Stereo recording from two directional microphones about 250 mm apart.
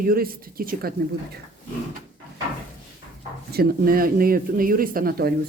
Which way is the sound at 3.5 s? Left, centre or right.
Right.